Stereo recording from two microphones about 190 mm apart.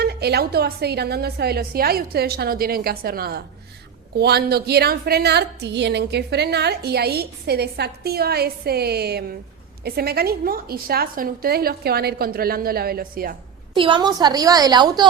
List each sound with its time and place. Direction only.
0.0 s a woman's voice: 60° right (ahead or behind)
13.7 s a woman's voice: 25° right (ahead or behind)